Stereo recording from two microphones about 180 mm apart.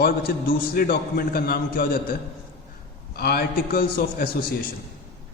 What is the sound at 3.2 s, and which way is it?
A man's voice, 60° left (ahead or behind).